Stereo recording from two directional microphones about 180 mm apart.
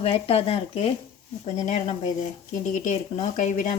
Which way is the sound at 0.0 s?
35° left (ahead or behind).